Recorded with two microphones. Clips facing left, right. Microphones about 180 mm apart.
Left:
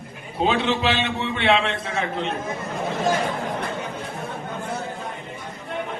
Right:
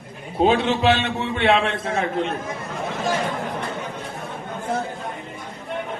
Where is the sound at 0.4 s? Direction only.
50° right (ahead or behind).